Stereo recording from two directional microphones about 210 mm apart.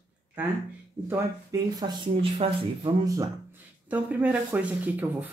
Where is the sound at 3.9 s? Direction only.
10° right (ahead or behind).